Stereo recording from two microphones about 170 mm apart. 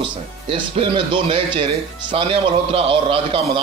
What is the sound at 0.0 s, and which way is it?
Speech, 30° right (ahead or behind).